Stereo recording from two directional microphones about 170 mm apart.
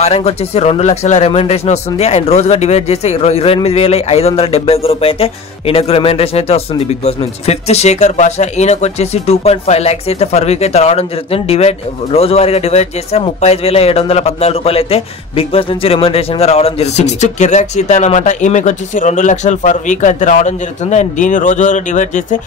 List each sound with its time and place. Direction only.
0.0 s speech: 40° left (ahead or behind)